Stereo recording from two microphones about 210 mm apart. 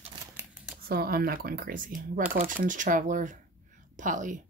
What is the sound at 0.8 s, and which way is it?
A woman's voice, 45° right (ahead or behind).